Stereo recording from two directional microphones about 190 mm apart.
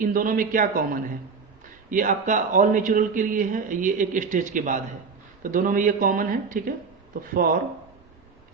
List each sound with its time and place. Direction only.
0.0 s a man's voice: 45° right (ahead or behind)
1.9 s a man's voice: 40° right (ahead or behind)